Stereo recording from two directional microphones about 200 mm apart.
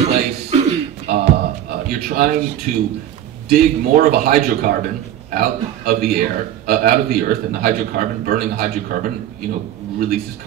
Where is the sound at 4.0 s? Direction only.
50° right (ahead or behind).